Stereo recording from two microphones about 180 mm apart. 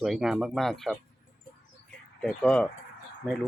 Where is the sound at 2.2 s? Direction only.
5° left (ahead or behind).